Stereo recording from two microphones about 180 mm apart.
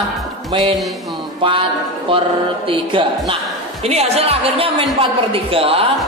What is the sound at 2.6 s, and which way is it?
A man's voice, 30° right (ahead or behind).